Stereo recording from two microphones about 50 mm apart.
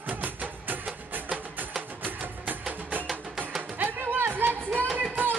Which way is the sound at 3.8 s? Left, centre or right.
Right.